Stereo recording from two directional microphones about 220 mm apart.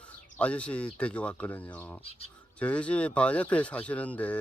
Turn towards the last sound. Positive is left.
turn(degrees=5)  # may be behind; listen again after turning